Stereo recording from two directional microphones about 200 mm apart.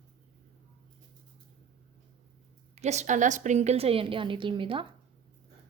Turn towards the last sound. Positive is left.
turn(degrees=-25)  # may be behind; listen again after turning